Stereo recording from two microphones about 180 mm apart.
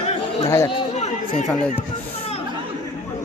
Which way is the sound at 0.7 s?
30° left (ahead or behind).